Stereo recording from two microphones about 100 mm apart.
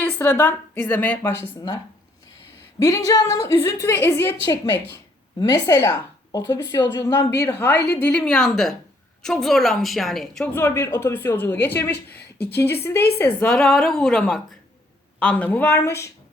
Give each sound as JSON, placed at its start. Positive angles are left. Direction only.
{"t": 0.0, "sound": "a woman's voice", "side_deg": 20}
{"t": 2.7, "sound": "a woman's voice", "side_deg": 35}
{"t": 5.4, "sound": "a woman's voice", "side_deg": 35}
{"t": 10.4, "sound": "a woman's voice", "side_deg": 20}